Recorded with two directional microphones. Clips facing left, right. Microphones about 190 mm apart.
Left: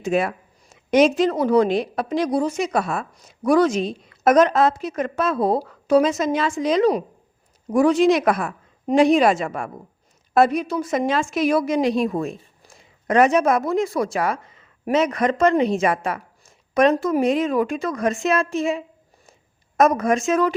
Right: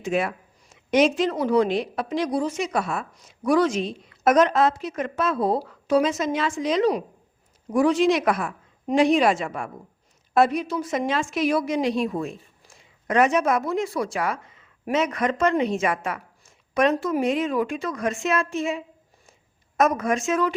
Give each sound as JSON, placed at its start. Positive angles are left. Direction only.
{"t": 0.0, "sound": "a woman's voice", "side_deg": 40}